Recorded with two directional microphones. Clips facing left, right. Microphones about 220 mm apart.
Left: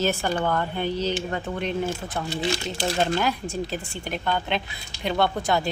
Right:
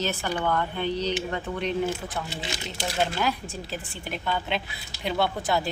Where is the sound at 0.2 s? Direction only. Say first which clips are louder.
Left 2 dB; 40° left (ahead or behind).